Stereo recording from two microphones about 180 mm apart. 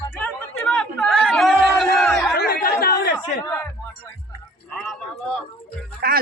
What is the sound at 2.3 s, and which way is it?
Chatter, 60° left (ahead or behind).